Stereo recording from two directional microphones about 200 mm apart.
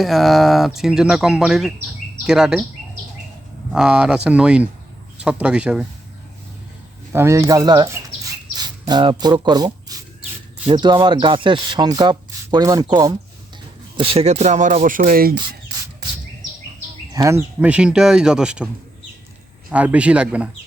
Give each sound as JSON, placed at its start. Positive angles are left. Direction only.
{"t": 0.0, "sound": "speech", "side_deg": 0}
{"t": 3.7, "sound": "speech", "side_deg": -5}
{"t": 7.1, "sound": "speech", "side_deg": -15}
{"t": 17.2, "sound": "speech", "side_deg": -15}
{"t": 19.7, "sound": "a man's voice", "side_deg": -5}